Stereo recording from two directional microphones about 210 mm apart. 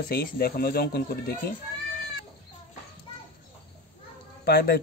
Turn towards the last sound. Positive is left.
turn(degrees=45)  # may be behind; listen again after turning